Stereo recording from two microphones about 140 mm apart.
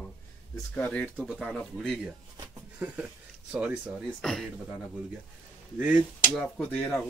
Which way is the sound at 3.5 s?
10° right (ahead or behind).